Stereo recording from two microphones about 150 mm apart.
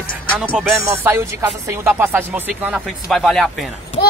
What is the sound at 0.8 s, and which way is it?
Music, 15° right (ahead or behind).